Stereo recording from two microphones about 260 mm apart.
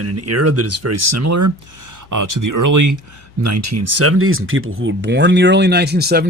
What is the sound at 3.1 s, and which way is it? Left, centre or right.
Speech, right.